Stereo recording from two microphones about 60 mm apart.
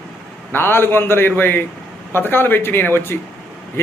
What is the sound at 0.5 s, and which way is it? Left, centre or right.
A man's voice, left.